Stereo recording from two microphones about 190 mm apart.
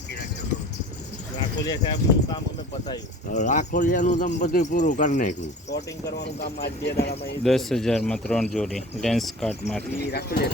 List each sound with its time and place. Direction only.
1.6 s speech: 20° left (ahead or behind)
3.2 s speech: 45° left (ahead or behind)
5.7 s speech: 60° left (ahead or behind)
7.4 s speech: centre (ahead or behind)
10.1 s speech: 55° left (ahead or behind)